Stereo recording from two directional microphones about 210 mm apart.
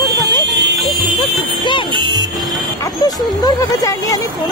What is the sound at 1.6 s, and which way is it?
Music, 20° left (ahead or behind).